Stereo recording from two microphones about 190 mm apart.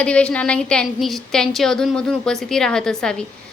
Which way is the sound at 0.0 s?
5° left (ahead or behind).